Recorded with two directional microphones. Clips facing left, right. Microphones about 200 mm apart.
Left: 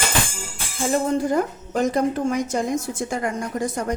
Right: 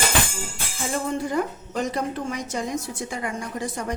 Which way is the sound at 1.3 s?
45° left (ahead or behind).